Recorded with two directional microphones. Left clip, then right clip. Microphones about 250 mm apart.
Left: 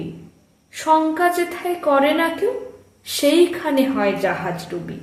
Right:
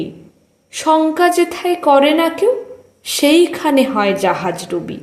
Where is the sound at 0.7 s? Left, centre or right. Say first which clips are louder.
Right 3 dB; right.